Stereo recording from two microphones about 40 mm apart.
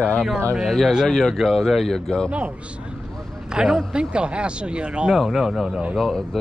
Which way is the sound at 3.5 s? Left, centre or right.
Centre.